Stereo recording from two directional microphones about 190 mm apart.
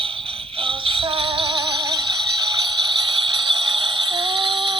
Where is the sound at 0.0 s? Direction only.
30° right (ahead or behind).